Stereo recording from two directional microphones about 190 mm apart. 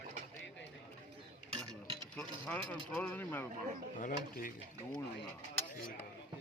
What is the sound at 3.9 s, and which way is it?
Mechanisms, 45° left (ahead or behind).